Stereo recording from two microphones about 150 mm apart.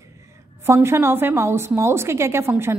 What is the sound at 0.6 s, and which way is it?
A woman's voice, 15° right (ahead or behind).